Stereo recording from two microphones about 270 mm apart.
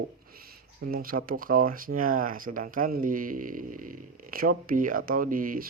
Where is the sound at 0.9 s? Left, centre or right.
Right.